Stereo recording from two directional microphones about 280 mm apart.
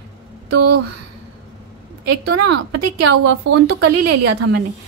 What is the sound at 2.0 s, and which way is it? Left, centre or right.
A woman's voice, right.